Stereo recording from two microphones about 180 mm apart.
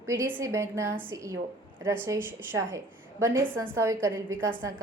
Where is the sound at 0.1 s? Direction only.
10° right (ahead or behind).